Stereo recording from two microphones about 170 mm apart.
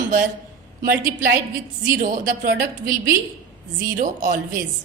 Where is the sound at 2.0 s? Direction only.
50° right (ahead or behind).